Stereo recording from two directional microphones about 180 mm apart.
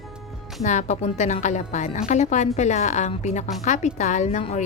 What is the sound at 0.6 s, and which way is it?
A woman's voice, 40° left (ahead or behind).